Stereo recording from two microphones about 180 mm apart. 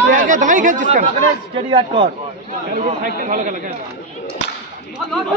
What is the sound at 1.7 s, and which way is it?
Speech, 25° right (ahead or behind).